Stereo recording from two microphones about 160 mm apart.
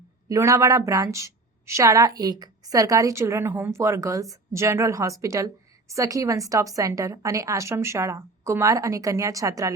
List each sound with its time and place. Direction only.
0.3 s a woman's voice: 20° right (ahead or behind)